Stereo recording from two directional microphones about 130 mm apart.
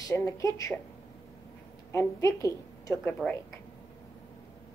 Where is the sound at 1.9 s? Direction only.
20° left (ahead or behind).